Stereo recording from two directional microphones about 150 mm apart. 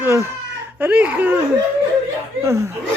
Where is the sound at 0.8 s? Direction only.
10° right (ahead or behind).